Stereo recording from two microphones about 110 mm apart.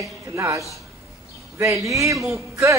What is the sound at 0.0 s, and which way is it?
A man's voice, 30° right (ahead or behind).